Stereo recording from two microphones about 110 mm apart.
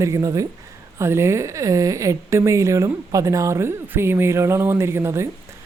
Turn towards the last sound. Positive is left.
turn(degrees=-25)  # may be behind; listen again after turning